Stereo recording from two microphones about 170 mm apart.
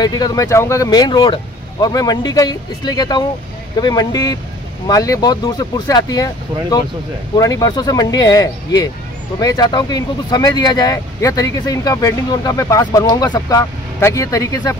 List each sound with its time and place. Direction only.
0.0 s speech: 20° left (ahead or behind)